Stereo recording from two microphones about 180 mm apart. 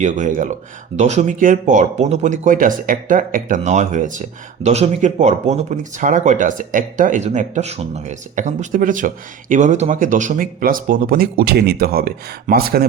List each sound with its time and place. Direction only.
0.0 s speech: 45° right (ahead or behind)